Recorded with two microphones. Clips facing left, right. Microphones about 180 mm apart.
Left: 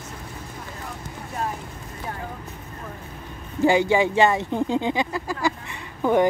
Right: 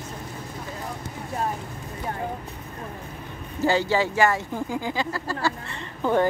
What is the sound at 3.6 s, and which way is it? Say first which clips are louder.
Speech: left 4 dB; 15° left (ahead or behind).